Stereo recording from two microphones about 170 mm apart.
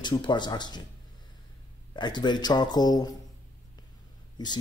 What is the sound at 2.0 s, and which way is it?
Speech, 25° left (ahead or behind).